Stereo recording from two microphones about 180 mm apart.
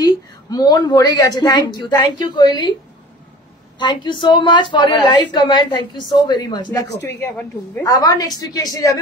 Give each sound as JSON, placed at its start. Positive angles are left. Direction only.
{"t": 0.0, "sound": "a woman's voice", "side_deg": 20}
{"t": 3.7, "sound": "a woman's voice", "side_deg": 25}
{"t": 6.9, "sound": "speech", "side_deg": 75}
{"t": 7.2, "sound": "a woman's voice", "side_deg": 10}